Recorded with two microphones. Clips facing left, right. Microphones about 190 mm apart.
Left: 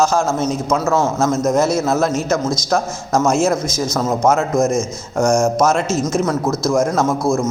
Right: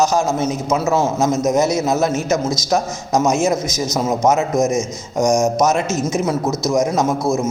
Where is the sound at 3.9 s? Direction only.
15° right (ahead or behind).